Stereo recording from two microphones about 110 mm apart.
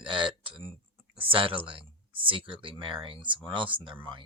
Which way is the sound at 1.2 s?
55° right (ahead or behind).